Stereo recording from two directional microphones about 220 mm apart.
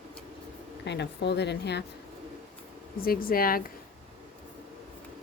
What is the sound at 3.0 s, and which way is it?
Speech, 40° left (ahead or behind).